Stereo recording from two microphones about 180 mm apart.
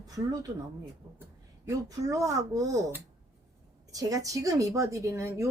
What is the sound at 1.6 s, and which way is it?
Speech, 20° right (ahead or behind).